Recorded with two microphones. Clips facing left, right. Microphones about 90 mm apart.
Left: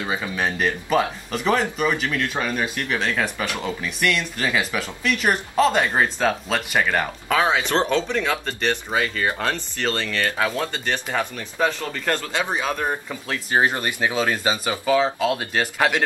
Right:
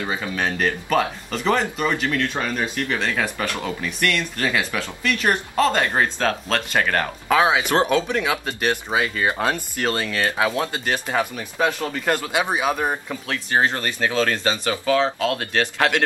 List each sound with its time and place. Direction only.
0.0 s speech: 5° left (ahead or behind)
7.2 s speech: 10° right (ahead or behind)
13.3 s speech: 10° left (ahead or behind)